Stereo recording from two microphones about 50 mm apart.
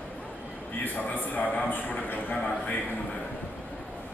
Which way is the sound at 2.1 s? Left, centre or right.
Left.